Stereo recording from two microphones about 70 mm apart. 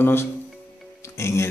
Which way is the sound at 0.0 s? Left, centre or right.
Left.